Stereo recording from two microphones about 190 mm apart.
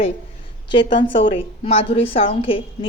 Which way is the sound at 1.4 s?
30° left (ahead or behind).